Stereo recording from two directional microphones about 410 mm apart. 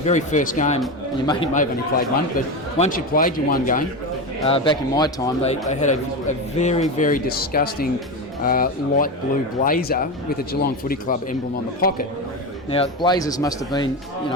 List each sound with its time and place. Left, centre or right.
0.0 s a man's voice: centre